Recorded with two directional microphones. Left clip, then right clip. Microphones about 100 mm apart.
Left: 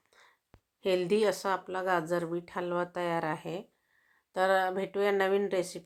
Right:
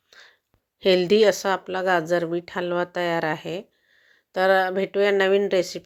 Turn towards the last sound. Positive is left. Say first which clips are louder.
# right 9 dB
turn(degrees=-35)  # may be behind; listen again after turning